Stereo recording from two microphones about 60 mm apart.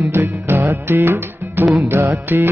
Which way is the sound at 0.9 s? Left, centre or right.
Right.